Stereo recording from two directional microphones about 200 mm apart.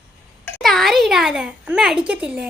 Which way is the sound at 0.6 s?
Centre (ahead or behind).